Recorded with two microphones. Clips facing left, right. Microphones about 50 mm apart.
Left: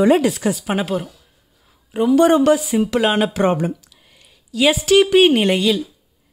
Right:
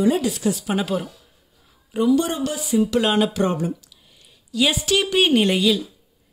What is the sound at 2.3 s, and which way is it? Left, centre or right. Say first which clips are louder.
Speech: left 12 dB; left.